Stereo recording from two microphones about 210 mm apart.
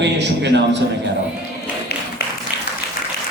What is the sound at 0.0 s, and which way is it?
Speech, 55° right (ahead or behind).